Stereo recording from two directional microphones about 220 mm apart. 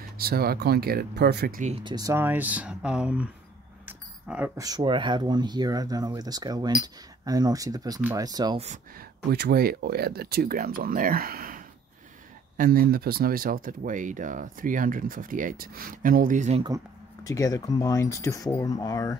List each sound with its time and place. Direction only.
0.2 s speech: 45° right (ahead or behind); by 3.3 s 5° right (ahead or behind)
3.8 s keys jangling: 5° right (ahead or behind)
4.6 s speech: 20° right (ahead or behind)
9.3 s speech: 45° right (ahead or behind)
17.2 s speech: 15° left (ahead or behind)